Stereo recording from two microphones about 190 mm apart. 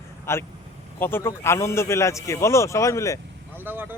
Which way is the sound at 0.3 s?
15° left (ahead or behind).